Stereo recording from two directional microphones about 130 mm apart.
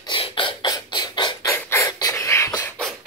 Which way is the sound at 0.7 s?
30° left (ahead or behind).